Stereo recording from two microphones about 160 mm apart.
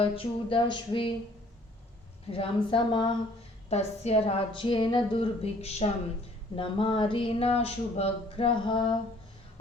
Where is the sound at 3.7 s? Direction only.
40° left (ahead or behind).